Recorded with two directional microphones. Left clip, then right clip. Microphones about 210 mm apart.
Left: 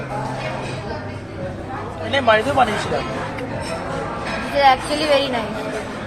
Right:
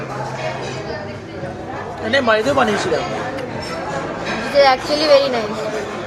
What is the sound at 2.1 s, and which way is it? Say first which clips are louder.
Speech: right 1 dB; 20° right (ahead or behind).